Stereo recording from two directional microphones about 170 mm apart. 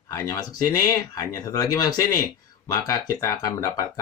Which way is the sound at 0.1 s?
20° left (ahead or behind).